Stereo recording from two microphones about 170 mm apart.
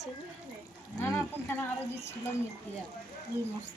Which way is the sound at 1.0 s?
15° left (ahead or behind).